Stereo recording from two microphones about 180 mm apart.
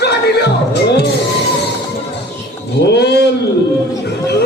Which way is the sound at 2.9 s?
65° left (ahead or behind).